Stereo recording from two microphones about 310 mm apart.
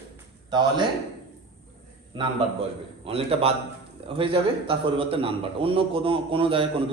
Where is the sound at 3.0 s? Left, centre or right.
Centre.